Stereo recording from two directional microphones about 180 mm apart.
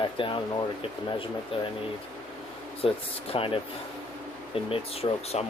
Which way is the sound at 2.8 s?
30° left (ahead or behind).